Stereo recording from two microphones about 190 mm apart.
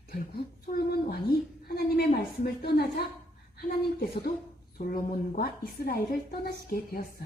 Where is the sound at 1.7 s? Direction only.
55° left (ahead or behind).